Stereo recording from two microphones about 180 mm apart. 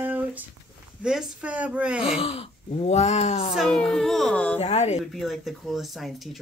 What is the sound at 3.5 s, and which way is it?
Speech, centre (ahead or behind).